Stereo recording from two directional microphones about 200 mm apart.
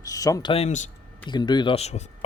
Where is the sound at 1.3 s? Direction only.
20° left (ahead or behind).